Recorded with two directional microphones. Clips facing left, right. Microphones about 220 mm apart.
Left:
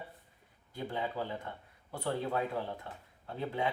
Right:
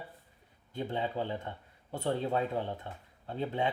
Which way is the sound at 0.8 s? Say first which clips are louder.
Right 3 dB; 25° right (ahead or behind).